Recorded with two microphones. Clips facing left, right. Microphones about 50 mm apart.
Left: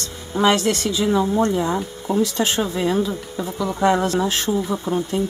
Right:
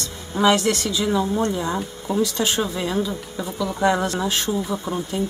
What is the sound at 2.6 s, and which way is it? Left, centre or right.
Speech, centre.